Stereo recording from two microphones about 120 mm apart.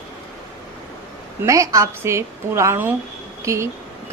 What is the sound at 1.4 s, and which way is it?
A woman's voice, 25° right (ahead or behind).